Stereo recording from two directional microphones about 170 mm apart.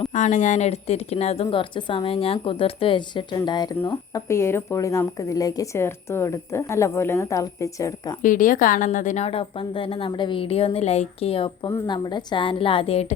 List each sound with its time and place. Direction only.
0.0 s speech: 45° left (ahead or behind); by 8.2 s 20° left (ahead or behind)
8.2 s speech: 50° left (ahead or behind)